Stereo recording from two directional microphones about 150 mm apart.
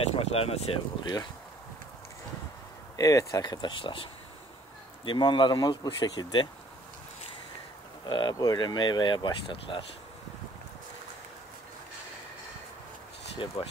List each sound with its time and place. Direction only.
0.1 s speech: 40° left (ahead or behind)
3.0 s speech: 25° left (ahead or behind)
8.0 s speech: 30° left (ahead or behind)
13.4 s speech: 35° left (ahead or behind)